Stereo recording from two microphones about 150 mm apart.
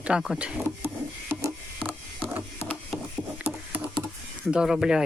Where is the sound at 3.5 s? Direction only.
5° right (ahead or behind).